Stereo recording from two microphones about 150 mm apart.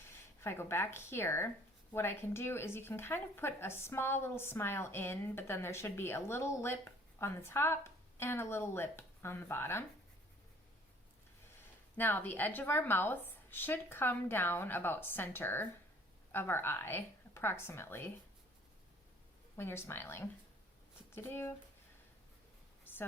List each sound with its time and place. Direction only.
0.0 s speech: 15° left (ahead or behind)
11.9 s speech: 15° left (ahead or behind)
19.5 s speech: 15° left (ahead or behind)